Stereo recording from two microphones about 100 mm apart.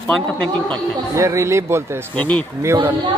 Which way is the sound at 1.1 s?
30° right (ahead or behind).